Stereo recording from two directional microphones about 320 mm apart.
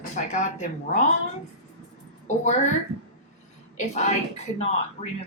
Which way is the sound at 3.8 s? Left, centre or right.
Left.